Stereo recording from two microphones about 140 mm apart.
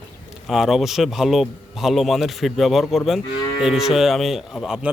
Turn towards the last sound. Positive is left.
turn(degrees=-5)  # may be behind; listen again after turning